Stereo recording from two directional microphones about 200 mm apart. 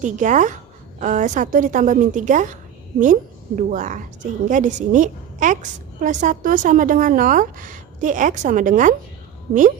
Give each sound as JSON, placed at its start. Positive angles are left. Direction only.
{"t": 0.0, "sound": "a woman's voice", "side_deg": -40}